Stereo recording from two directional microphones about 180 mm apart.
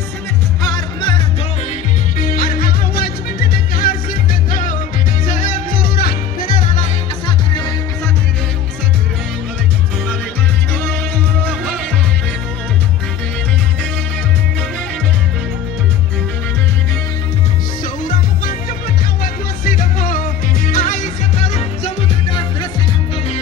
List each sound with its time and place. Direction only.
0.6 s music: 20° left (ahead or behind)
2.1 s music: 50° left (ahead or behind)
7.2 s music: 25° left (ahead or behind)
18.0 s music: 55° left (ahead or behind); by 22.7 s 30° left (ahead or behind)